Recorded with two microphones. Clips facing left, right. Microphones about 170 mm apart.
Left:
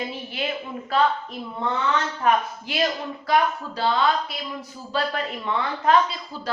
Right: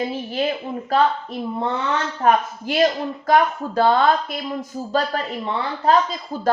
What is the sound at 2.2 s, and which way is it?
Speech, 45° right (ahead or behind).